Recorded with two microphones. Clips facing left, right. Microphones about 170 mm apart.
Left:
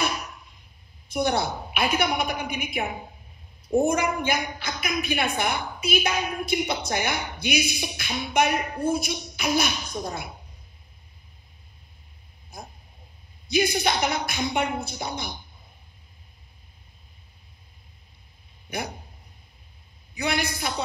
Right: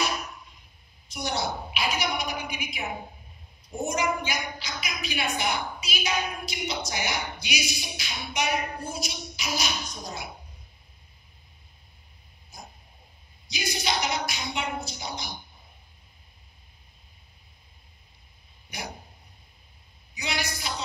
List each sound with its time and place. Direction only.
1.0 s a woman's voice: 55° left (ahead or behind)
12.5 s a sound: 55° left (ahead or behind)
13.5 s a woman's voice: 55° left (ahead or behind)
20.2 s a woman's voice: 55° left (ahead or behind)